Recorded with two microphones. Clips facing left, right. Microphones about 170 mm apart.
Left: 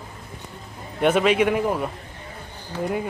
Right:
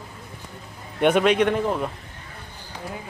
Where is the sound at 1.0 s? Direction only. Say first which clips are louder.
Even; 5° left (ahead or behind).